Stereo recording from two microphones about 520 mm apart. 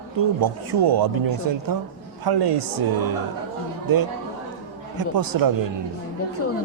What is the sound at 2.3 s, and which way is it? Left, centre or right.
Speech, right.